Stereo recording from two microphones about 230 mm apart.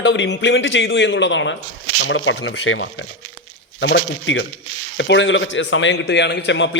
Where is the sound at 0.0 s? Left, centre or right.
Left.